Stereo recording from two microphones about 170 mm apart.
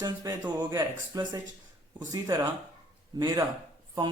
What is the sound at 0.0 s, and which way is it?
Speech, 25° right (ahead or behind).